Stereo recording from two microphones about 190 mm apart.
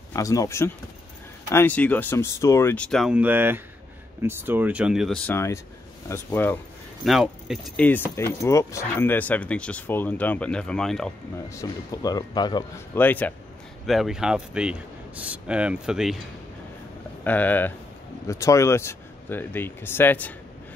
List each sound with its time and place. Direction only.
0.1 s a man's voice: 15° left (ahead or behind)
7.1 s a man's voice: centre (ahead or behind)
11.5 s speech: 20° left (ahead or behind)
12.9 s speech: 10° left (ahead or behind)
13.8 s a man's voice: centre (ahead or behind)
17.2 s speech: 10° left (ahead or behind)